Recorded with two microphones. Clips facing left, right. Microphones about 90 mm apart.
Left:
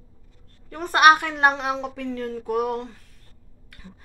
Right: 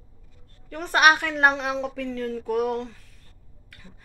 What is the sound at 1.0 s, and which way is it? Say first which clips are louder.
Speech: left 4 dB; 35° left (ahead or behind).